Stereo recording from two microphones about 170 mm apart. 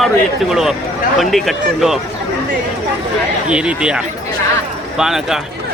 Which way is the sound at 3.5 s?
5° right (ahead or behind).